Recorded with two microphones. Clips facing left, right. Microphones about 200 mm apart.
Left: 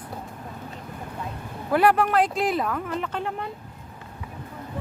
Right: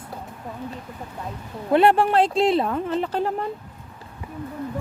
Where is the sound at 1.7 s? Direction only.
25° right (ahead or behind).